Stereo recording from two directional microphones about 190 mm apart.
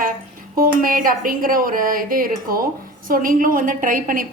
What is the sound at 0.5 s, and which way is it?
Speech, 50° right (ahead or behind).